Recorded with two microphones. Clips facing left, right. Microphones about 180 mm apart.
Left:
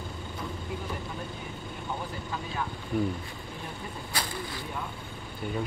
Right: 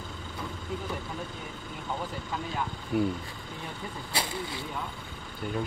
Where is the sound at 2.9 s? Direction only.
5° right (ahead or behind).